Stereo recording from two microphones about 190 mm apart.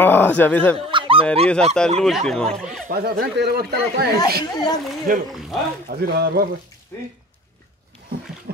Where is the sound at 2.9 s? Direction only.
55° right (ahead or behind).